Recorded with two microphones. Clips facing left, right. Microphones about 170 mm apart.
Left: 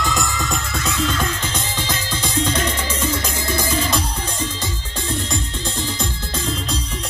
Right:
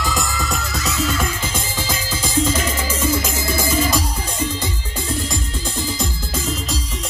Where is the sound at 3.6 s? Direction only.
45° right (ahead or behind).